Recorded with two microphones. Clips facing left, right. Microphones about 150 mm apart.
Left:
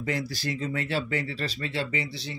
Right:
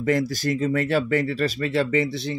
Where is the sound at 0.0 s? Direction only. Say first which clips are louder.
Right 8 dB; 45° right (ahead or behind).